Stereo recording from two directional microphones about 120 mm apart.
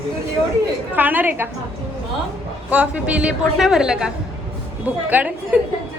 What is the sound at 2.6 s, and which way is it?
A woman's voice, 10° right (ahead or behind).